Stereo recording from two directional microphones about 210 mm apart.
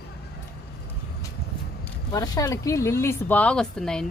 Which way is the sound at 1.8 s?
15° left (ahead or behind).